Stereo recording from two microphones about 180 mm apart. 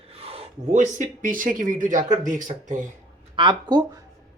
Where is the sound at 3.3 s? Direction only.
25° right (ahead or behind).